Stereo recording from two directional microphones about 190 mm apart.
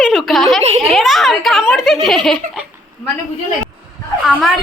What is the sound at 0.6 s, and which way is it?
Speech, 35° right (ahead or behind).